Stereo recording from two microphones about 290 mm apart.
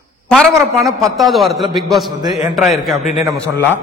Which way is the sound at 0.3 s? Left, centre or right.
Centre.